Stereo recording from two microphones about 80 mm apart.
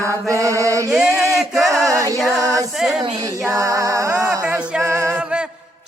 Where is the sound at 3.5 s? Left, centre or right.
Right.